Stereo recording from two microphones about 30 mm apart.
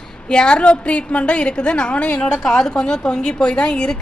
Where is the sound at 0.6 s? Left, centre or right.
Left.